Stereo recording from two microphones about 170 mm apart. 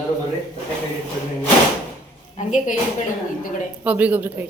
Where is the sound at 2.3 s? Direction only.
45° left (ahead or behind).